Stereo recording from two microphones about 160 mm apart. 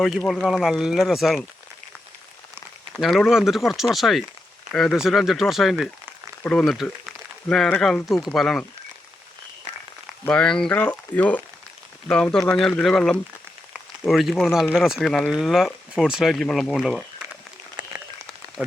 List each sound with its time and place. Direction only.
0.0 s speech: centre (ahead or behind)
2.9 s speech: centre (ahead or behind)
10.2 s speech: 5° left (ahead or behind)
17.8 s a sound: 30° right (ahead or behind)